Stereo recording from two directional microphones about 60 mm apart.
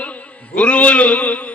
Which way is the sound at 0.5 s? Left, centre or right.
Left.